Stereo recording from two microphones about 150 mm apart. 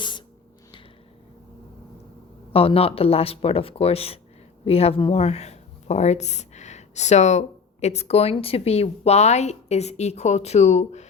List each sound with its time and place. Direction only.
2.5 s speech: 40° left (ahead or behind)